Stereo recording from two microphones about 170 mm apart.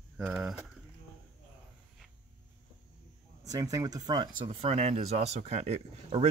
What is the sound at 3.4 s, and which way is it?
Speech, 20° right (ahead or behind).